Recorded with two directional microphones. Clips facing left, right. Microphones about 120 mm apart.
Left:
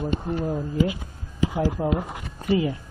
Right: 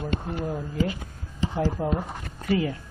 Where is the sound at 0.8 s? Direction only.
10° left (ahead or behind).